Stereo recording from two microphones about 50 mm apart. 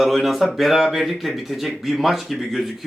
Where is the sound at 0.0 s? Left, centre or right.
Centre.